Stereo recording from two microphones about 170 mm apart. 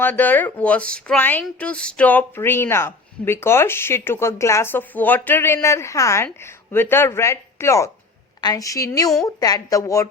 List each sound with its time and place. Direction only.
0.0 s a woman's voice: 10° left (ahead or behind)